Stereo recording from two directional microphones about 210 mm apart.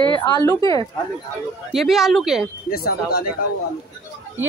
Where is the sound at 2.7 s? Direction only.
45° left (ahead or behind).